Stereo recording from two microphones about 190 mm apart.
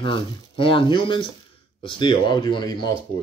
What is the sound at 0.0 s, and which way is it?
Speech, 25° left (ahead or behind).